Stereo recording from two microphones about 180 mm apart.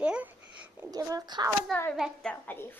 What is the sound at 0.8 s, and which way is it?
Speech, 20° right (ahead or behind).